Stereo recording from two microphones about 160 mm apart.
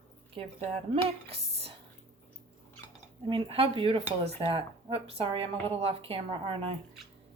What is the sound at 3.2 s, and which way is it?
A woman's voice, 35° right (ahead or behind).